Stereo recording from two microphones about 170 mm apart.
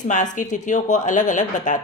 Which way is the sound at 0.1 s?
45° left (ahead or behind).